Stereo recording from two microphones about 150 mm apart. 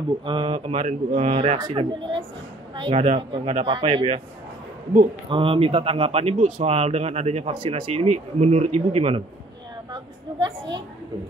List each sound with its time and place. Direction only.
0.2 s speech: 30° right (ahead or behind)
1.6 s speech: 30° right (ahead or behind)
3.0 s speech: 45° right (ahead or behind)
5.3 s speech: 40° right (ahead or behind)